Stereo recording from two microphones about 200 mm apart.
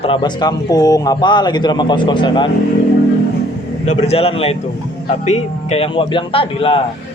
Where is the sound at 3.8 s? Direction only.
35° left (ahead or behind).